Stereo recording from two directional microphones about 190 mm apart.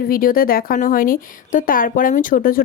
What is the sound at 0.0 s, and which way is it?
Speech, 50° left (ahead or behind).